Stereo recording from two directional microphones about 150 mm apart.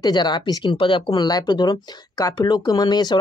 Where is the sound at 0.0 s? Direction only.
30° left (ahead or behind).